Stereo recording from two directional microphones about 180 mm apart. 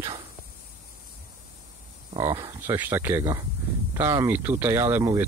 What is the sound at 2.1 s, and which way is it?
Speech, 25° right (ahead or behind).